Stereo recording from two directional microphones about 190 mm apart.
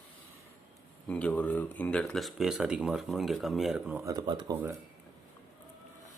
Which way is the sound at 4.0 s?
20° right (ahead or behind).